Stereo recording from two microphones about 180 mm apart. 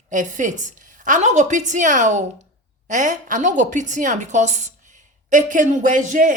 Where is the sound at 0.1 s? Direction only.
45° right (ahead or behind).